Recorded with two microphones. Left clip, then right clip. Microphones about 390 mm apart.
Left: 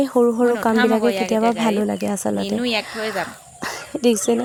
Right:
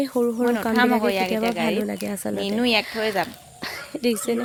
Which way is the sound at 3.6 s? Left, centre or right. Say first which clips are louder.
Left 5 dB; right.